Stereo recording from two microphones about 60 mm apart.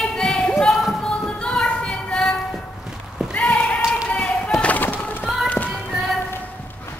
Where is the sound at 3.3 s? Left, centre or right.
Left.